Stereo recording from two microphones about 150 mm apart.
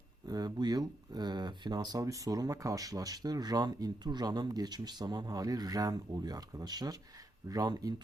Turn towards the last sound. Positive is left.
turn(degrees=-25)  # may be behind; listen again after turning